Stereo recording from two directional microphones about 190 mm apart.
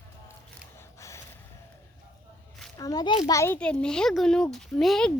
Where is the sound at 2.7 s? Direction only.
20° left (ahead or behind).